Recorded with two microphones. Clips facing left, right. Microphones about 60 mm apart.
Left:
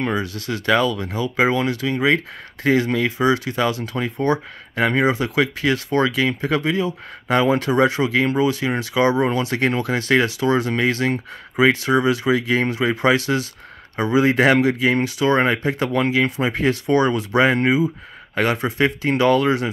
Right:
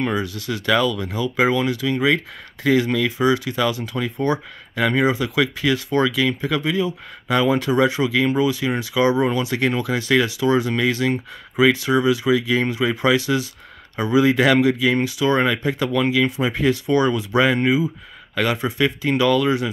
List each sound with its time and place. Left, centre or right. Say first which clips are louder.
0.0 s speech: even; left